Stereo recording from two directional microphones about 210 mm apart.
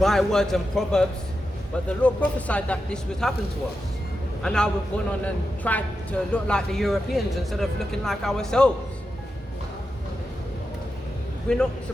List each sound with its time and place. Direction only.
0.0 s a man's voice: centre (ahead or behind)
4.4 s a man's voice: 5° left (ahead or behind)
11.4 s a man's voice: 5° left (ahead or behind)